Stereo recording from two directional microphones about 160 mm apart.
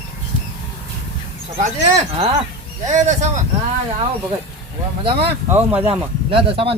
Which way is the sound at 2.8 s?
50° right (ahead or behind).